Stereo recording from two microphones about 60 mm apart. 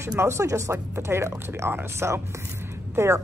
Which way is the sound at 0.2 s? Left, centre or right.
Right.